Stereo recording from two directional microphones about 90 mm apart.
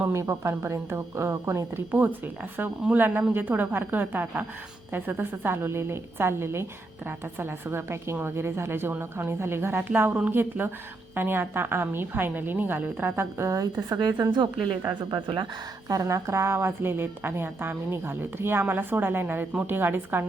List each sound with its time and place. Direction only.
0.1 s a woman's voice: 30° right (ahead or behind)
15.1 s speech: 60° right (ahead or behind)
15.9 s a woman's voice: 40° right (ahead or behind); by 20.2 s 25° right (ahead or behind)